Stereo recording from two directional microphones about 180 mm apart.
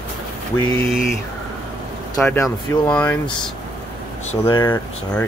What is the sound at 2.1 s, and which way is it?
Speech, 10° left (ahead or behind).